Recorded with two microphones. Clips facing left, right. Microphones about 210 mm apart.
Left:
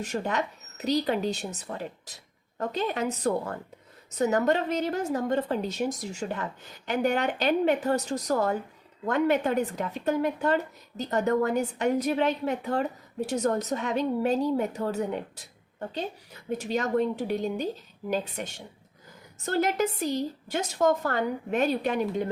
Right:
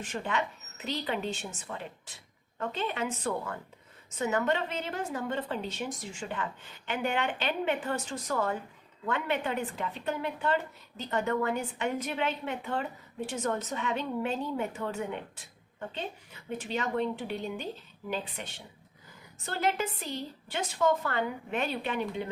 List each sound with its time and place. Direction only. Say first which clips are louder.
0.0 s a woman's voice: left 4 dB; 40° left (ahead or behind)